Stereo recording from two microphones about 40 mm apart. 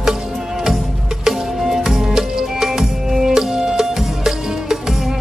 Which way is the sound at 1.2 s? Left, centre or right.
Centre.